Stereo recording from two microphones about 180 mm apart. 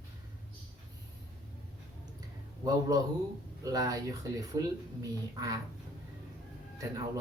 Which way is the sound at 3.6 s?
20° right (ahead or behind).